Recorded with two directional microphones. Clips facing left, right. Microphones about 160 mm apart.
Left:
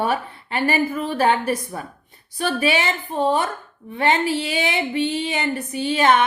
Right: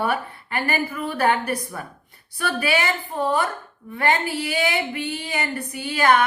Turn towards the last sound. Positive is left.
turn(degrees=20)  # may be behind; listen again after turning